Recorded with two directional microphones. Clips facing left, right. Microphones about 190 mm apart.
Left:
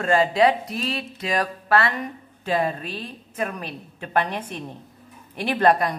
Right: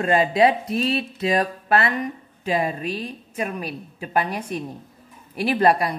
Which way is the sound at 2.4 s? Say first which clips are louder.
Right 1 dB; 10° right (ahead or behind).